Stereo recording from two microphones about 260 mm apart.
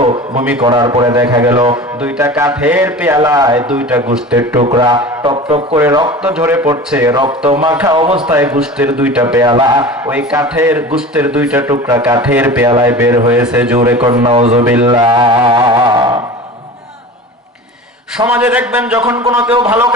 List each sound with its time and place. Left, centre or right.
0.0 s a man's voice: right; by 4.6 s centre
4.6 s a man's voice: centre
8.4 s a man's voice: centre
14.0 s a man's voice: centre
14.6 s a man's voice: centre
18.3 s a man's voice: centre